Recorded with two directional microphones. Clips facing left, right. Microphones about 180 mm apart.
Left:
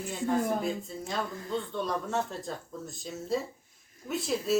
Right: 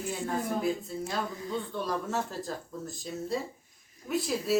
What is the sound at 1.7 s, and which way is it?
Speech, 5° right (ahead or behind).